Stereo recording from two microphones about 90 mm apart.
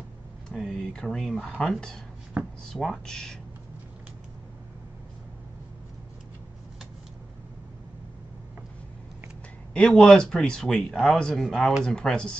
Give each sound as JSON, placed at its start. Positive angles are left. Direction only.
{"t": 0.5, "sound": "speech", "side_deg": 5}
{"t": 2.4, "sound": "speech", "side_deg": -20}
{"t": 2.7, "sound": "speech", "side_deg": 5}
{"t": 9.8, "sound": "speech", "side_deg": 5}